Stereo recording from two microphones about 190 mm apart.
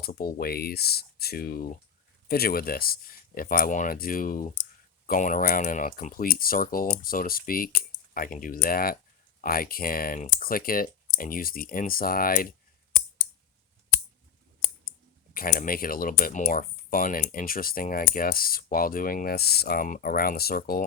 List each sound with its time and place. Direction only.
0.0 s speech: 55° left (ahead or behind)
15.3 s speech: 50° left (ahead or behind)